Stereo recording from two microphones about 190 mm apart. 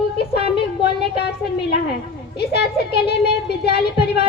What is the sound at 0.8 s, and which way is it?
Speech, 60° left (ahead or behind).